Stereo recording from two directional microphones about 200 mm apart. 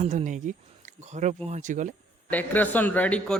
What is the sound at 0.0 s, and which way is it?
Speech, 35° right (ahead or behind).